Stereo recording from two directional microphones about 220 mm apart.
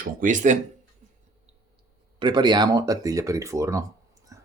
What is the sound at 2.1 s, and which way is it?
Speech, 20° right (ahead or behind).